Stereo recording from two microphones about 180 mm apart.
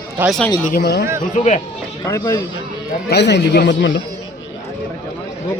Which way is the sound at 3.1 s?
70° left (ahead or behind).